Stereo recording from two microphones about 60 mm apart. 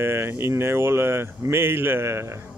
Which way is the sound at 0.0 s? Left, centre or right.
Right.